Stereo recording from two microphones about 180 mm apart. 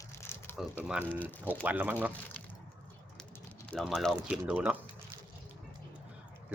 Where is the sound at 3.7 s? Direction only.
Centre (ahead or behind).